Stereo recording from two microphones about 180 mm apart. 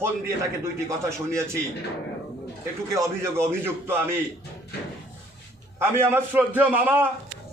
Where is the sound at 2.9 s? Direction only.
15° right (ahead or behind).